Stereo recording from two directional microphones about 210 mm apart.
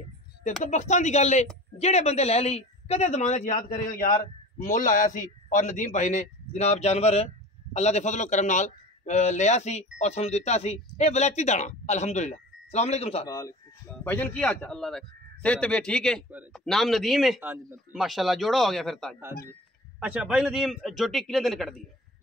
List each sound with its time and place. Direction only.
0.7 s a man's voice: 35° left (ahead or behind)
13.3 s speech: 15° left (ahead or behind)